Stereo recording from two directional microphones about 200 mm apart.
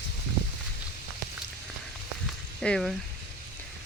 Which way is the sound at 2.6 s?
5° left (ahead or behind).